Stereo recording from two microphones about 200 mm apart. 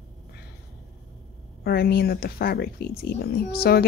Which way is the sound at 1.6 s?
50° left (ahead or behind).